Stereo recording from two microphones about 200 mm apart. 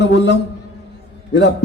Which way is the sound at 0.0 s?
60° left (ahead or behind).